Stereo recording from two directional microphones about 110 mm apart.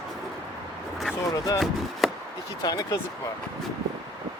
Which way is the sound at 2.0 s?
Centre (ahead or behind).